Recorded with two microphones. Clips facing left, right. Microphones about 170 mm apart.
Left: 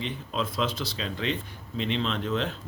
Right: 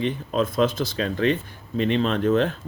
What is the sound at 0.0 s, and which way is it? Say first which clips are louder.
Speech: right 8 dB; 50° right (ahead or behind).